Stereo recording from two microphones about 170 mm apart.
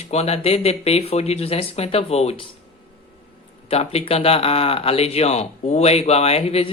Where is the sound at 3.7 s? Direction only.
35° left (ahead or behind).